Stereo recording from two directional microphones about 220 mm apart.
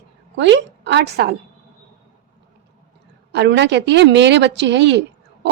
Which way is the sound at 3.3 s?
50° right (ahead or behind).